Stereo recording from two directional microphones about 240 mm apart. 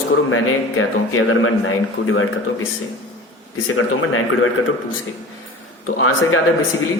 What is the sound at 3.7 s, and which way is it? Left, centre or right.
Speech, left.